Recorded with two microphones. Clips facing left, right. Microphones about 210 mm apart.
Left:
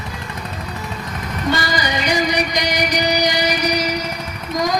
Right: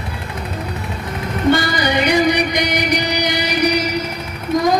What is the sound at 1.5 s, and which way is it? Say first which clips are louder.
Music: right 4 dB; 60° right (ahead or behind).